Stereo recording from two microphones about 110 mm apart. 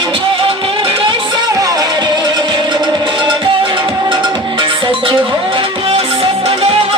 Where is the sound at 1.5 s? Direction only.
35° right (ahead or behind); by 6.7 s 60° right (ahead or behind).